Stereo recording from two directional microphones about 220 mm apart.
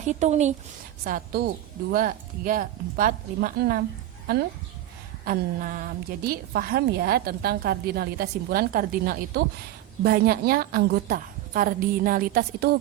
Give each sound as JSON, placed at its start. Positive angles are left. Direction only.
{"t": 0.0, "sound": "speech", "side_deg": -30}
{"t": 1.0, "sound": "speech", "side_deg": -40}
{"t": 5.2, "sound": "a woman's voice", "side_deg": -40}